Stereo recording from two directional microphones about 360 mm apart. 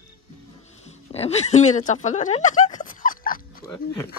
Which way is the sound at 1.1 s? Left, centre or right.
Centre.